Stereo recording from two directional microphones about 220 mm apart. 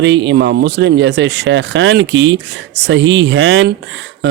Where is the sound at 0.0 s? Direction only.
55° right (ahead or behind).